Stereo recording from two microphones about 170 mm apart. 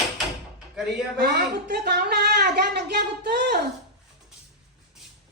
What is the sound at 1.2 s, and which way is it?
Speech, 65° right (ahead or behind).